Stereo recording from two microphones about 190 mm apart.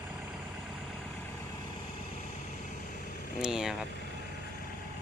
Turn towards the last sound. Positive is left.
turn(degrees=-5)  # may be behind; listen again after turning